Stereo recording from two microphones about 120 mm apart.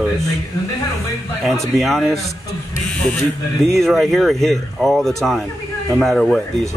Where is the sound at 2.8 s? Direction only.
5° left (ahead or behind).